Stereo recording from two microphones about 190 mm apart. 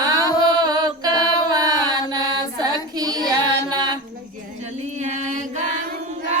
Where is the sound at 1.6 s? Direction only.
20° right (ahead or behind).